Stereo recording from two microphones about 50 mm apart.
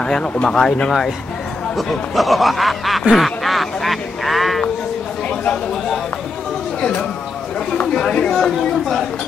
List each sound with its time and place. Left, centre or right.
0.0 s speech: centre
1.8 s speech: centre
6.8 s speech: left